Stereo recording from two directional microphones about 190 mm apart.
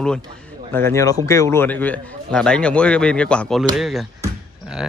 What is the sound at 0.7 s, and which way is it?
A man's voice, 15° left (ahead or behind).